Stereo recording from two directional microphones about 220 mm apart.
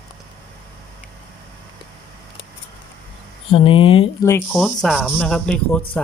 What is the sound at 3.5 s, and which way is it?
Speech, 25° left (ahead or behind).